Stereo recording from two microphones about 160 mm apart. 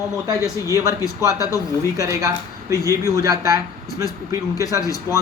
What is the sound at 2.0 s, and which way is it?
Speech, 20° right (ahead or behind).